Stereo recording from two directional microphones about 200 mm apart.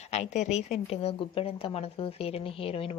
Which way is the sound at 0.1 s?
30° left (ahead or behind).